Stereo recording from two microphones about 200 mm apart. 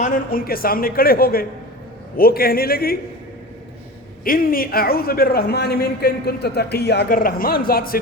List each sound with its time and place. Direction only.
0.0 s a man's voice: 45° left (ahead or behind)
4.2 s a man's voice: 45° left (ahead or behind)